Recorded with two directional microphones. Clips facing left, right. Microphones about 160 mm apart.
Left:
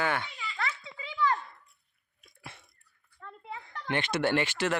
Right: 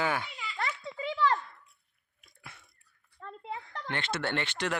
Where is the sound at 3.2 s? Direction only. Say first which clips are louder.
Right 3 dB; 30° right (ahead or behind).